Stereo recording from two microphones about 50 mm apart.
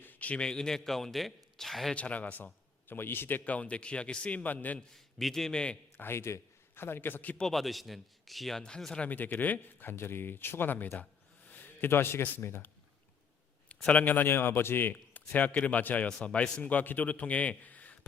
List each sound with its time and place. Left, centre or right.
0.0 s speech: left; by 1.9 s centre
2.0 s a man's voice: left
4.9 s a man's voice: centre
6.0 s a man's voice: left
7.4 s a man's voice: centre
9.0 s a man's voice: left
9.9 s a man's voice: left
13.7 s a sound: left
14.0 s a man's voice: left
15.3 s a man's voice: left
16.0 s a man's voice: left